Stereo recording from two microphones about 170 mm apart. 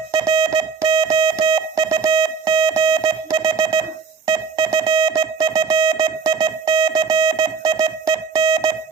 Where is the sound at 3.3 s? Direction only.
25° right (ahead or behind).